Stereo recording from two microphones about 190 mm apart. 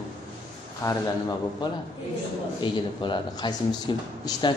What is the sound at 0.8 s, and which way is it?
A man's voice, 20° left (ahead or behind).